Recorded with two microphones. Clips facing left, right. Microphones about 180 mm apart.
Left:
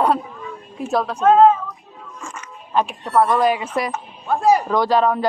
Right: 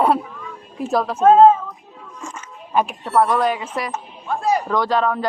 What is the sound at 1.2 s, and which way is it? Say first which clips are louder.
Speech: right 2 dB; 30° right (ahead or behind).